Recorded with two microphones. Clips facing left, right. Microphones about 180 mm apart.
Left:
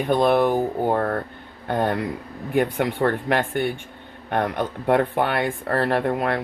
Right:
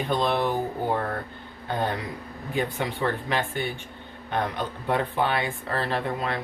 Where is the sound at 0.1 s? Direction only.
50° left (ahead or behind).